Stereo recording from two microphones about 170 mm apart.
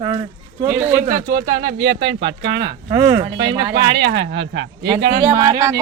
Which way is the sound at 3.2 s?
25° right (ahead or behind).